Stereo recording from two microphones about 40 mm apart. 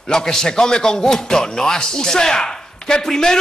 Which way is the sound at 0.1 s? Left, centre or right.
Centre.